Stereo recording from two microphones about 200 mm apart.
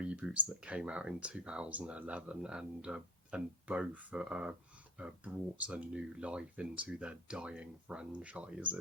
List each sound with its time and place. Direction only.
0.0 s speech: 5° right (ahead or behind)